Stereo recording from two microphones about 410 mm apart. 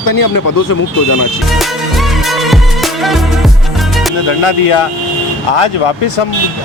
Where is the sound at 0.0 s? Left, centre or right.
Left.